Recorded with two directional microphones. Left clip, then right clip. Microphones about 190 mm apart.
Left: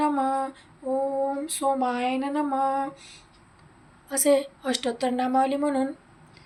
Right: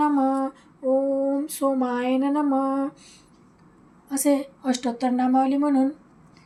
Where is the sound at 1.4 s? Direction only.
60° right (ahead or behind).